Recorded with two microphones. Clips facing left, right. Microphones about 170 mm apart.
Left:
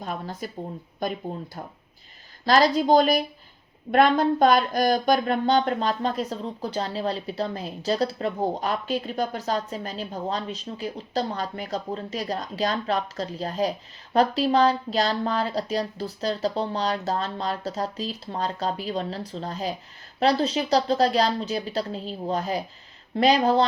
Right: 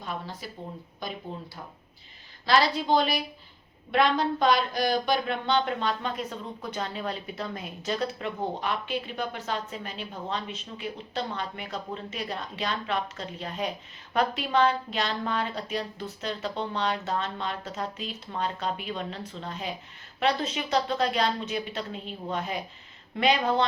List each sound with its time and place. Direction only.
0.0 s a woman's voice: 45° left (ahead or behind)
2.5 s a woman's voice: 45° left (ahead or behind)